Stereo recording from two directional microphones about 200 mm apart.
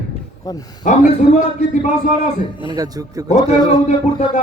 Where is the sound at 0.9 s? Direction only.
35° left (ahead or behind).